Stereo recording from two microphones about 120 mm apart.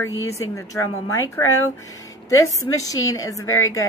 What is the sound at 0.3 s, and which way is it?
Speech, 25° left (ahead or behind).